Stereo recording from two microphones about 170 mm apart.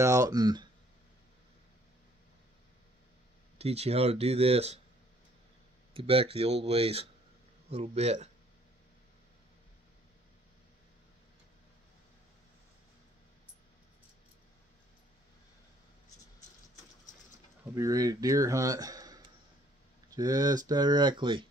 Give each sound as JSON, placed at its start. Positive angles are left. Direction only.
{"t": 0.0, "sound": "speech", "side_deg": -20}
{"t": 3.5, "sound": "speech", "side_deg": -40}
{"t": 5.9, "sound": "speech", "side_deg": -35}
{"t": 17.7, "sound": "speech", "side_deg": -20}